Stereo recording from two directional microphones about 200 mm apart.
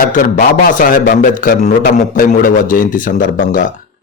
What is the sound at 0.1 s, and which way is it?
A man's voice, 45° left (ahead or behind).